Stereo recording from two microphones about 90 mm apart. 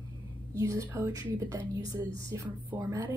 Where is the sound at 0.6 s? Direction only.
35° right (ahead or behind).